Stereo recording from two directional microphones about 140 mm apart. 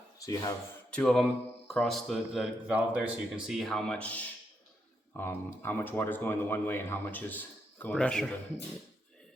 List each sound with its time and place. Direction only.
0.2 s speech: 25° left (ahead or behind)
0.9 s speech: 5° left (ahead or behind)